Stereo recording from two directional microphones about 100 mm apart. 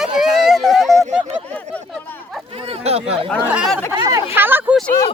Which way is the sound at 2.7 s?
85° right.